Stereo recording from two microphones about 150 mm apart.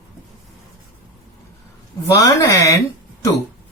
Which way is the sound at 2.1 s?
20° left (ahead or behind).